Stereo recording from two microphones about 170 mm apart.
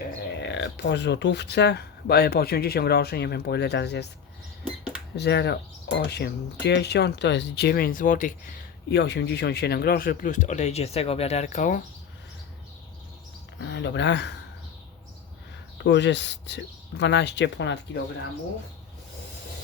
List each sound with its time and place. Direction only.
0.3 s speech: 90° left
5.1 s speech: 80° left; by 8.5 s 50° left (ahead or behind)
8.9 s speech: 90° left; by 11.8 s 45° left (ahead or behind)
13.6 s speech: 90° left
15.8 s speech: 90° left